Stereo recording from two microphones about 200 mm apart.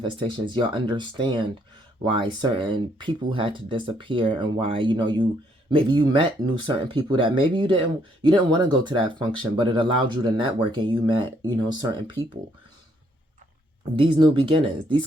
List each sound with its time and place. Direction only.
0.0 s speech: 25° right (ahead or behind)
13.9 s speech: 25° right (ahead or behind)